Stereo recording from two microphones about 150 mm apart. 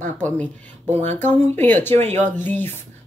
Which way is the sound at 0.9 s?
50° right (ahead or behind).